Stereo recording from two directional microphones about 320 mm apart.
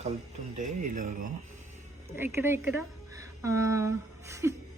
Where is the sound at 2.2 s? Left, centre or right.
Centre.